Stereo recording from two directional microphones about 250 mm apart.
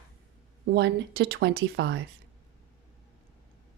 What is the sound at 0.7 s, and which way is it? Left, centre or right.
Speech, right.